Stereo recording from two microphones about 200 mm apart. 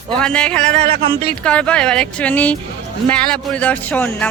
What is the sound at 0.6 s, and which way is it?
Speech, 30° right (ahead or behind).